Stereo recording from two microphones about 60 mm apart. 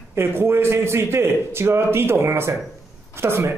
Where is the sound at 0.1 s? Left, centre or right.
Right.